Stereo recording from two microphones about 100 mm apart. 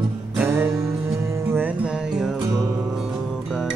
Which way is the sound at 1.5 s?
15° right (ahead or behind).